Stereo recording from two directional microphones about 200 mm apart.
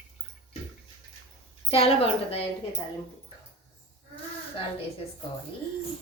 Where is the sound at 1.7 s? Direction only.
30° left (ahead or behind).